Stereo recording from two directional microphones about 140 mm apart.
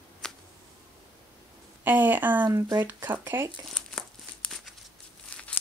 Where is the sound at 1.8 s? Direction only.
15° right (ahead or behind).